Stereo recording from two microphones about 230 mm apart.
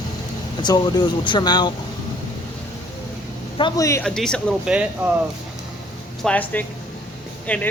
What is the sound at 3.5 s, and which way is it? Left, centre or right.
Speech, centre.